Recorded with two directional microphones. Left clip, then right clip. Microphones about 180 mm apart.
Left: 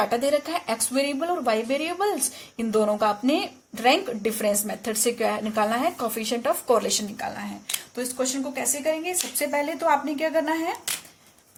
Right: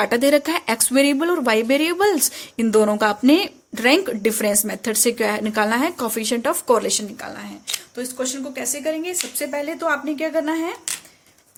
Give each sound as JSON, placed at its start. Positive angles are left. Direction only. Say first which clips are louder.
{"t": 0.0, "sound": "a woman's voice", "louder": "right 6 dB", "side_deg": -45}